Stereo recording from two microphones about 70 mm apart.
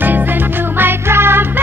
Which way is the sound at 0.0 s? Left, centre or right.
Right.